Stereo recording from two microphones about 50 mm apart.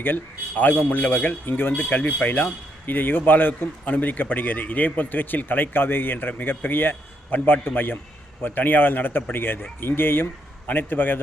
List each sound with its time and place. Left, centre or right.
0.0 s speech: left
1.8 s speech: left